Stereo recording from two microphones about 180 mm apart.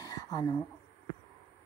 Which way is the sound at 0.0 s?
20° left (ahead or behind).